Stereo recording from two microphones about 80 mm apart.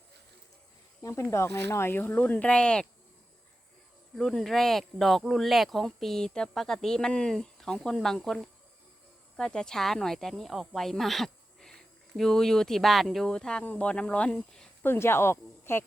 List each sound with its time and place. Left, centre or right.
1.0 s speech: left; by 2.8 s centre
4.2 s speech: centre
14.8 s speech: left